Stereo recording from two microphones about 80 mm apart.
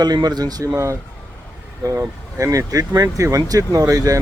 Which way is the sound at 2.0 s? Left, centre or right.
Right.